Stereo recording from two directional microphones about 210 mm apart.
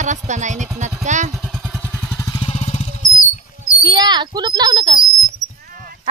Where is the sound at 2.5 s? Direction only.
30° left (ahead or behind).